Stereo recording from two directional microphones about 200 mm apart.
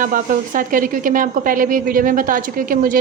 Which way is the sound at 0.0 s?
40° right (ahead or behind).